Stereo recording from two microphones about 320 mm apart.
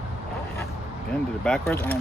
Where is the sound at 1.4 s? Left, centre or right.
Centre.